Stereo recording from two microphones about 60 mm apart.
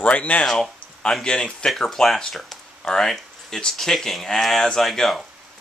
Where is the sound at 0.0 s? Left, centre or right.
Left.